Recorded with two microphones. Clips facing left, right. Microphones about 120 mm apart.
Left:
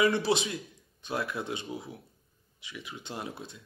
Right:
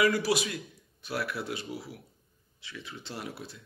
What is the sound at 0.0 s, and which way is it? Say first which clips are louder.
A man's voice: even; 25° left (ahead or behind).